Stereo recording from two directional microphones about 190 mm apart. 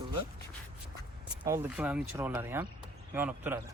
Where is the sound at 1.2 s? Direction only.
20° right (ahead or behind).